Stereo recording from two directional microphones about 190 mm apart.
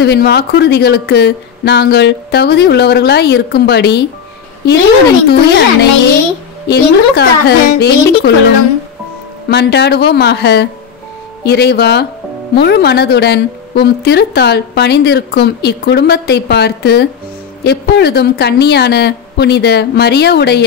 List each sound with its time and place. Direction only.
0.0 s a woman's voice: 60° left (ahead or behind)
5.5 s a woman's voice: 60° left (ahead or behind)
9.5 s a woman's voice: 60° left (ahead or behind)